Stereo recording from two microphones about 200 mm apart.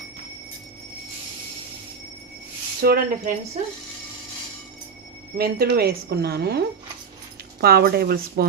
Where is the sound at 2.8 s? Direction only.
50° right (ahead or behind).